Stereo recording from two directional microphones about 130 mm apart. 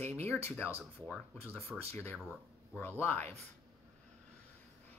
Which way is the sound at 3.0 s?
15° left (ahead or behind).